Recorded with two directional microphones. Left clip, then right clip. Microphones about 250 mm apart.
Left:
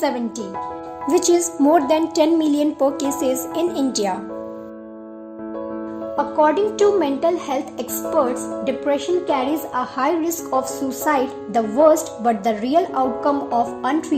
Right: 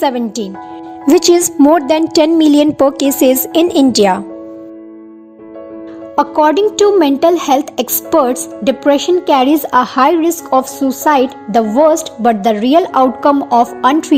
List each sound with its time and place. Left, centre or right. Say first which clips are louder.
0.0 s speech: right 7 dB; right
6.1 s speech: right 7 dB; right